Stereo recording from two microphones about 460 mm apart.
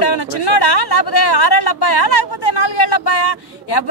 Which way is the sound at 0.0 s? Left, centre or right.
Left.